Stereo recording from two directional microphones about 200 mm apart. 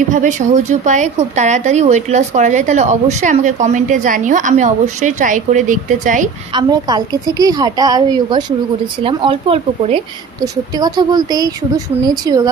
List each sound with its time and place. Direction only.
0.1 s a woman's voice: 40° right (ahead or behind)
6.5 s a woman's voice: 20° right (ahead or behind)